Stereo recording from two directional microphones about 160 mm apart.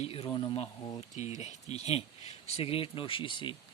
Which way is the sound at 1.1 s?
45° left (ahead or behind).